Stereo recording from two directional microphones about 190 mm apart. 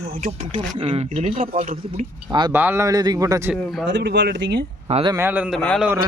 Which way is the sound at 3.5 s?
Centre (ahead or behind).